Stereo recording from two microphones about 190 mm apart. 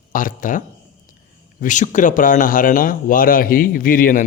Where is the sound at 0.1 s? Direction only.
45° left (ahead or behind).